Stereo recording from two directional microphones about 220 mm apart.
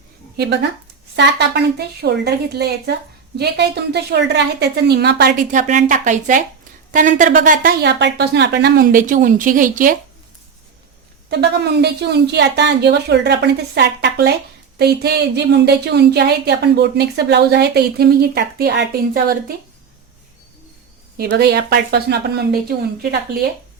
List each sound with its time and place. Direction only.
1.1 s a woman's voice: 50° right (ahead or behind)
11.3 s a woman's voice: 50° right (ahead or behind)
21.2 s a woman's voice: 45° right (ahead or behind)